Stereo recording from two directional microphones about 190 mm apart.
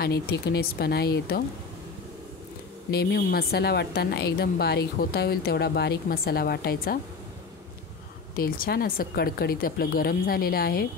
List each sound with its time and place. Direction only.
0.0 s a woman's voice: 55° left (ahead or behind)
2.9 s a woman's voice: 55° left (ahead or behind)
8.4 s speech: 50° left (ahead or behind)